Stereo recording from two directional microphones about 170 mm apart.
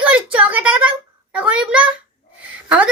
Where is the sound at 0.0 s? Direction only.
10° right (ahead or behind).